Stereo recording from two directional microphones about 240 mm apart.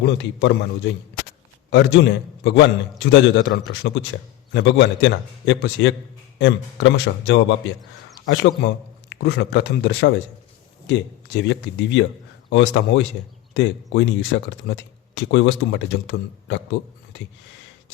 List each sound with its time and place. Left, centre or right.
0.0 s speech: left